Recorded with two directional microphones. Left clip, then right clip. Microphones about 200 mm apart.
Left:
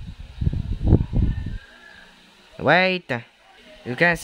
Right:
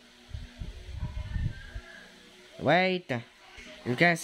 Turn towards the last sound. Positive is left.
turn(degrees=15)  # may be behind; listen again after turning